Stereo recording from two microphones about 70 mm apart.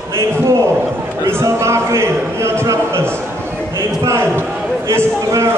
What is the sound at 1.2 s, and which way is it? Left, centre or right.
A man's voice, right.